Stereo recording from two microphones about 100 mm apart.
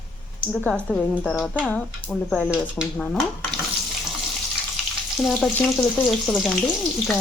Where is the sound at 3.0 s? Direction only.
5° left (ahead or behind).